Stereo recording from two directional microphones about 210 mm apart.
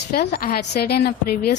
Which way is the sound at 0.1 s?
45° left (ahead or behind).